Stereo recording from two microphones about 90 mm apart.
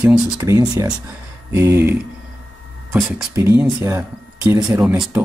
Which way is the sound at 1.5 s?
30° right (ahead or behind).